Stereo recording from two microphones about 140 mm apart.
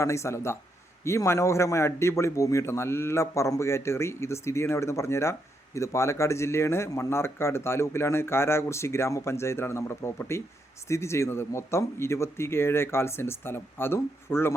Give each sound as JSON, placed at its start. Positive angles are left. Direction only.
{"t": 0.0, "sound": "a man's voice", "side_deg": 20}